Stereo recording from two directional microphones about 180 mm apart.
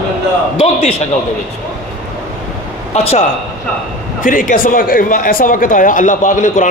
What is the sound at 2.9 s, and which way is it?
Speech, 35° left (ahead or behind).